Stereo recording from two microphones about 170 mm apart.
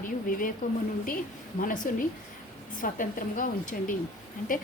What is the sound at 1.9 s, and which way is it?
A woman's voice, 55° left (ahead or behind).